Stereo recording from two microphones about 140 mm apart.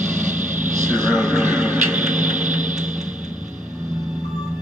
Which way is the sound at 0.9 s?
15° right (ahead or behind).